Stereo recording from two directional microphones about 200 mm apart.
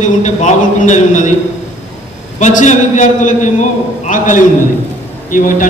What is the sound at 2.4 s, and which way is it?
A man's voice, 35° left (ahead or behind).